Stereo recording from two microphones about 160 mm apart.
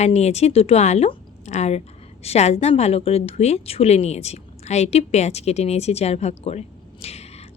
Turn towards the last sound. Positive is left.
turn(degrees=40)  # may be behind; listen again after turning